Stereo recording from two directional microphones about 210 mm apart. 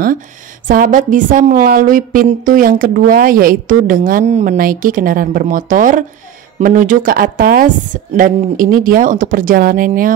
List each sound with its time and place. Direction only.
0.7 s a woman's voice: 40° right (ahead or behind)